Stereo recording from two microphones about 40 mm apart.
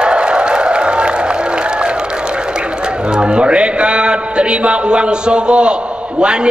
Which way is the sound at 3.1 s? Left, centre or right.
Right.